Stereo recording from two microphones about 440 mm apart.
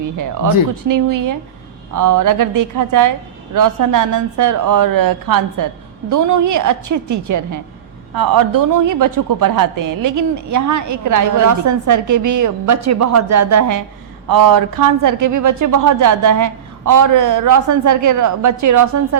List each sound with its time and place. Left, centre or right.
0.0 s a woman's voice: right
8.1 s a man's voice: right